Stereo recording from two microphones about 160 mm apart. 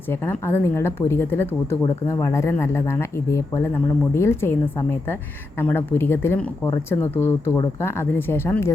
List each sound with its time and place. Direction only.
0.1 s speech: 15° left (ahead or behind)